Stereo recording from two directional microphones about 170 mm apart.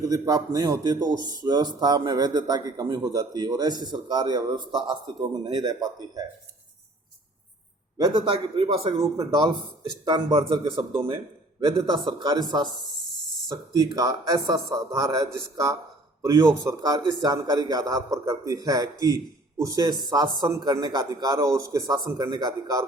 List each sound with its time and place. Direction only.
0.0 s a man's voice: 20° right (ahead or behind)
7.9 s a man's voice: 25° right (ahead or behind)
9.0 s a man's voice: 25° right (ahead or behind)
12.0 s a man's voice: 25° right (ahead or behind)
13.7 s a man's voice: 20° right (ahead or behind)